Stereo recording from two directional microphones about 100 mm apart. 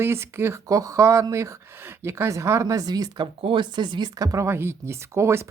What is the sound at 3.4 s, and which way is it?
Speech, 50° right (ahead or behind).